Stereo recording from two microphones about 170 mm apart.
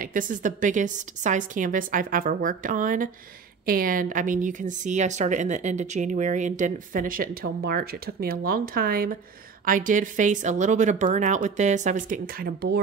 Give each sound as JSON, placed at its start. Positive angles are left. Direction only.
{"t": 0.0, "sound": "a woman's voice", "side_deg": -50}